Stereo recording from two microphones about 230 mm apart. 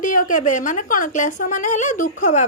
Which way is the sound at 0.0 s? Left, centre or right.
Left.